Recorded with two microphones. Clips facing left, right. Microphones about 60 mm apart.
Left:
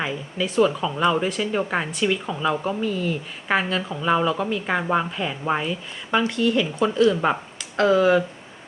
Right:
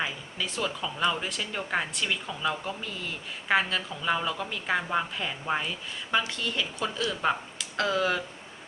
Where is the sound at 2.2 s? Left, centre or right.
Centre.